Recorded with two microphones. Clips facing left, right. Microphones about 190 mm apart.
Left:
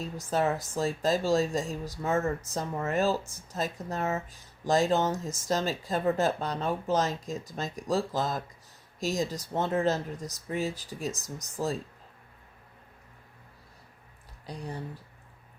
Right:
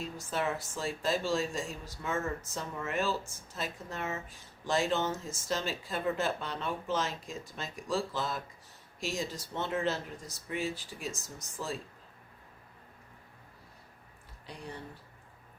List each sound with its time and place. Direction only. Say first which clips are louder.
0.0 s speech: left 6 dB; 40° left (ahead or behind)
14.5 s speech: left 6 dB; 40° left (ahead or behind)